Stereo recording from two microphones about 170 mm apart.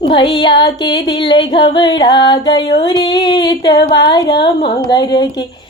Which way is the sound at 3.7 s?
90° left.